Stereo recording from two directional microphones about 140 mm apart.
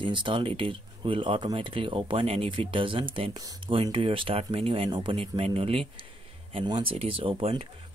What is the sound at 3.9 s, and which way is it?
Speech, 40° right (ahead or behind).